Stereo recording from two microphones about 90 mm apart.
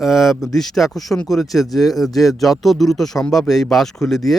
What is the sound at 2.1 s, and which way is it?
Speech, 40° left (ahead or behind).